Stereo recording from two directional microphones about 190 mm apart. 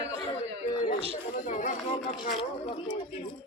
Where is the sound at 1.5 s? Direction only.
40° left (ahead or behind).